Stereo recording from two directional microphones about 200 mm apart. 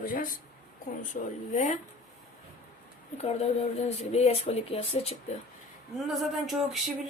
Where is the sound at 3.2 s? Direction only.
30° left (ahead or behind).